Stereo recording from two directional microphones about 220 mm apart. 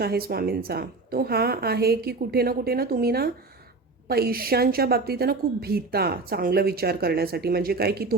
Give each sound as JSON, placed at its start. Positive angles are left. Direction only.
{"t": 0.0, "sound": "a woman's voice", "side_deg": -45}